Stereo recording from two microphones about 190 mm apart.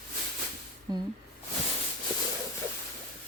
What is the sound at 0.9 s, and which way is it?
Speech, 20° right (ahead or behind).